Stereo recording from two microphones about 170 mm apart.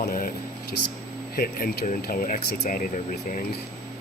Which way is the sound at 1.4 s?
60° left (ahead or behind).